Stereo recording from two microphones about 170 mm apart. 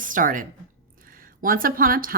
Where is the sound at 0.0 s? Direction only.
50° right (ahead or behind).